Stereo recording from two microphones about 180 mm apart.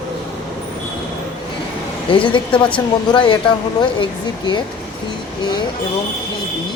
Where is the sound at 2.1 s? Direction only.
30° left (ahead or behind).